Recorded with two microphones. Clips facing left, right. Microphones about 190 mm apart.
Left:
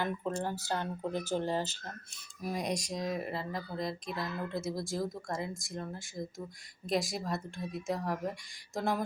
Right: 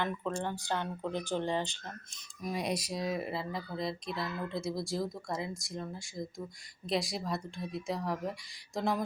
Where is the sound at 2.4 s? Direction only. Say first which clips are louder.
Even; centre (ahead or behind).